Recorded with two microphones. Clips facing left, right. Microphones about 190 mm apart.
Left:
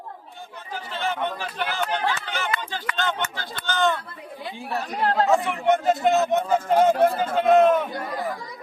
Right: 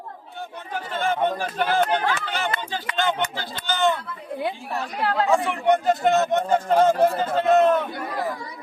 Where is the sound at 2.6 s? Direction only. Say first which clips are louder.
Right 3 dB; 20° right (ahead or behind).